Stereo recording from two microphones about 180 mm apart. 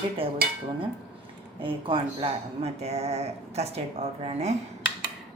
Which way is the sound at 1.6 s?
30° right (ahead or behind).